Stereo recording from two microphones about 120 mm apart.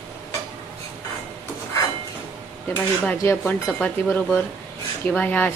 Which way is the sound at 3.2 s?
25° left (ahead or behind).